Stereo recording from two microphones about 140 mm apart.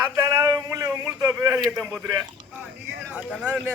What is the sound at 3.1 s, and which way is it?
Speech, 10° right (ahead or behind).